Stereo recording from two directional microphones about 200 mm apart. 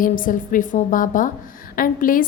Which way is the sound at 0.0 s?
40° left (ahead or behind).